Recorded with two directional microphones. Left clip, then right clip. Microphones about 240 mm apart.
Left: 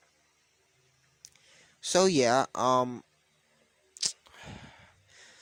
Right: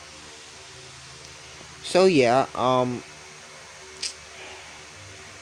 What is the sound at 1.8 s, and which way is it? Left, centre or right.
Speech, left.